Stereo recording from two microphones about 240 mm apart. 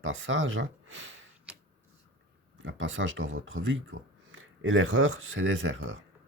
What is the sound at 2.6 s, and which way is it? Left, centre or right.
Speech, right.